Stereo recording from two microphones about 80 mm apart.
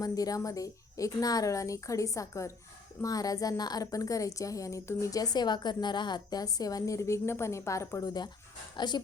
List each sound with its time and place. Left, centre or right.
0.0 s a woman's voice: left
5.2 s a woman's voice: left
8.7 s speech: left